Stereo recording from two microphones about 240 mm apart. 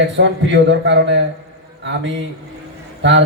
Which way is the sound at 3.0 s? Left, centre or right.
Right.